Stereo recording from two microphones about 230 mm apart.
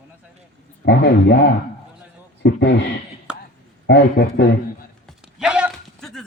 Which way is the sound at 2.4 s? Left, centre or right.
Left.